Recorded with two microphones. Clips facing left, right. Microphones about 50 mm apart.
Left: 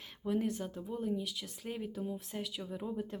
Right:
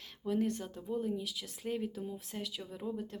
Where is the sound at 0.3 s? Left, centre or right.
Centre.